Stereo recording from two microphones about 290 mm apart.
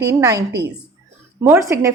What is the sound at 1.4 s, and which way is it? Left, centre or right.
Speech, centre.